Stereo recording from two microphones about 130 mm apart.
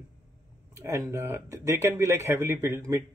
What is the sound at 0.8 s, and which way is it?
Speech, 20° right (ahead or behind).